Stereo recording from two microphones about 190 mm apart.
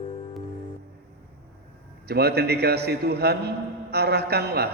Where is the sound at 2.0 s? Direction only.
55° right (ahead or behind).